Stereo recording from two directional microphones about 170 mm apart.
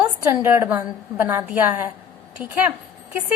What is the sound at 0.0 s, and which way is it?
A woman's voice, 15° right (ahead or behind).